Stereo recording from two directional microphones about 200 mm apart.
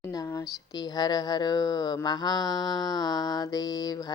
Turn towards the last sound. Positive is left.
turn(degrees=20)  # may be behind; listen again after turning